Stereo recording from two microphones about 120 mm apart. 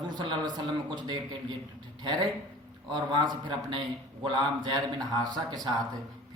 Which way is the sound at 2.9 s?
40° right (ahead or behind).